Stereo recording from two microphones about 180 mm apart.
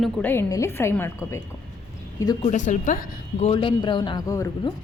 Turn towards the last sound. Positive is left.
turn(degrees=20)  # may be behind; listen again after turning